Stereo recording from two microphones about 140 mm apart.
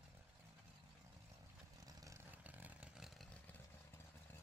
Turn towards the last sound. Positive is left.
turn(degrees=-5)  # may be behind; listen again after turning